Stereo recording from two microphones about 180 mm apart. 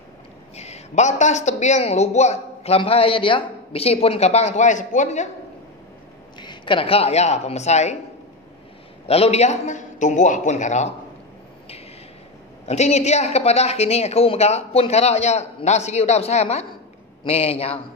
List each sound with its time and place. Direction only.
0.6 s speech: 35° left (ahead or behind)
6.4 s speech: 25° left (ahead or behind)
9.0 s speech: 35° left (ahead or behind)
12.6 s speech: 40° left (ahead or behind)